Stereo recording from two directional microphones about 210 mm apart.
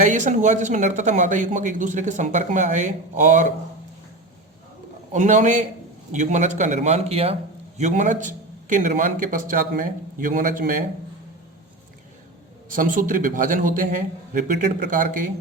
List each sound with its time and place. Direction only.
0.0 s speech: 35° right (ahead or behind)
5.1 s speech: 35° right (ahead or behind)
12.7 s speech: 40° right (ahead or behind)